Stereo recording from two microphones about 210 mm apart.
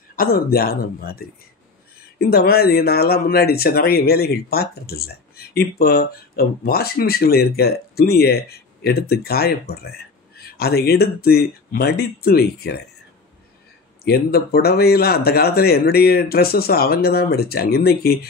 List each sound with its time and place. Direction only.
0.1 s speech: 45° left (ahead or behind)
14.0 s speech: 50° left (ahead or behind)